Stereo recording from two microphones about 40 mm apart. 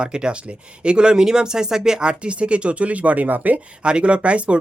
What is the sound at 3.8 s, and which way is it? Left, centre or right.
Speech, right.